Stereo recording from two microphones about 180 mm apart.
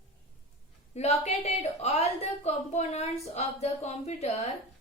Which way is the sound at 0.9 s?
35° left (ahead or behind).